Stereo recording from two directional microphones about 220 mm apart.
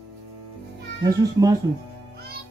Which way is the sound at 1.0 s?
15° right (ahead or behind).